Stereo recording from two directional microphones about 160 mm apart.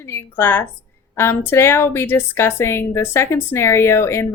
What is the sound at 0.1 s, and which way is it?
Speech, 15° left (ahead or behind).